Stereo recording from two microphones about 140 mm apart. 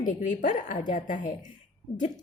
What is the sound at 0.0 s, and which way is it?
A woman's voice, 65° left (ahead or behind).